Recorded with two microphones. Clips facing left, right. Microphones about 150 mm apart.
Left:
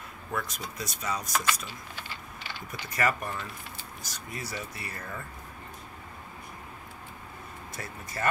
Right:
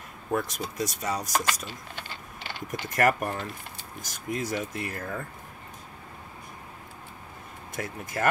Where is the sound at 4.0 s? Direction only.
90° right.